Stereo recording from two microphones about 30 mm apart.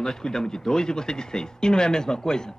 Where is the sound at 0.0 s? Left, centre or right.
Left.